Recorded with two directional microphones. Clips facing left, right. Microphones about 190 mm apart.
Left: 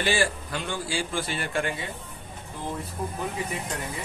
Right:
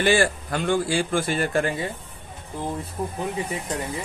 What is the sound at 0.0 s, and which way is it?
Speech, 55° right (ahead or behind).